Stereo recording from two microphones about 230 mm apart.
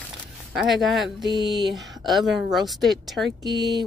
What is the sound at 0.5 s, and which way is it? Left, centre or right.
Speech, centre.